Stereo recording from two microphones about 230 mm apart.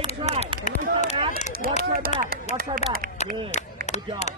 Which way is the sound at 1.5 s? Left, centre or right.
Right.